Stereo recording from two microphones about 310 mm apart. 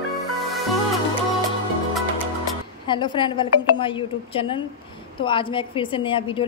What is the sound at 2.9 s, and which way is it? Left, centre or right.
A woman's voice, centre.